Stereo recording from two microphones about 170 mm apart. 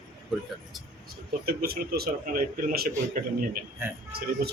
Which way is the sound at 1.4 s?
65° right (ahead or behind).